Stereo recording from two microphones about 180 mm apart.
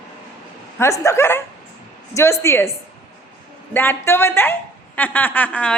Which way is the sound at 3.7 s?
10° left (ahead or behind).